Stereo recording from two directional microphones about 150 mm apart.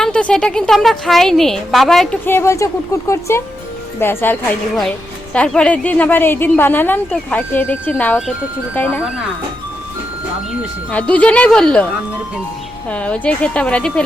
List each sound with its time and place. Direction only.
0.0 s a woman's voice: 5° left (ahead or behind)
2.2 s a woman's voice: 15° left (ahead or behind)
10.9 s a woman's voice: 10° left (ahead or behind)
12.9 s a woman's voice: 10° left (ahead or behind)